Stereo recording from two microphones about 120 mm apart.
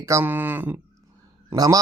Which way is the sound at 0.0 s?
20° right (ahead or behind).